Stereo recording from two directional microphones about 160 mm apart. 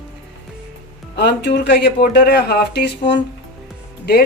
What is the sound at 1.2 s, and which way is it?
Speech, 90° left.